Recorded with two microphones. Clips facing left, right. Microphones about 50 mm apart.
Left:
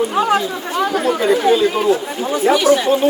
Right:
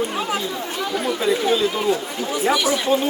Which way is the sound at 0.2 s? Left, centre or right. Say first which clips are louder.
Left 8 dB; left.